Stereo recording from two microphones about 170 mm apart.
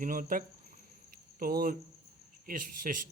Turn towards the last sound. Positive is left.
turn(degrees=-50)  # may be behind; listen again after turning